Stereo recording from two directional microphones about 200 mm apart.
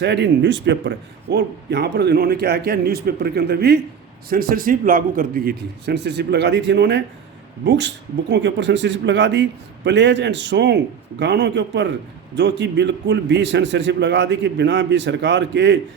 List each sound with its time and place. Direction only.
0.0 s speech: 60° right (ahead or behind)